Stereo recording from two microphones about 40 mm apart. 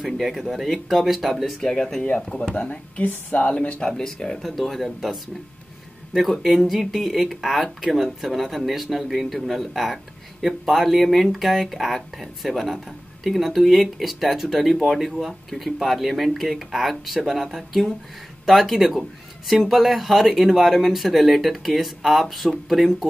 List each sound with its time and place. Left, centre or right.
0.2 s speech: centre
2.0 s speech: left
3.1 s speech: left
3.9 s speech: centre
4.4 s speech: centre